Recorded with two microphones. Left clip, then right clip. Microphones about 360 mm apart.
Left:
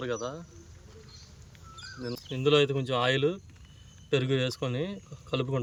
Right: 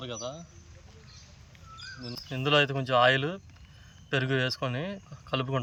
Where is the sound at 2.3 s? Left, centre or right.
Centre.